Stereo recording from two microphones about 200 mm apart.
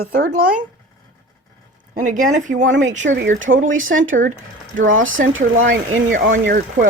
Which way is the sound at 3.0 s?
65° right (ahead or behind).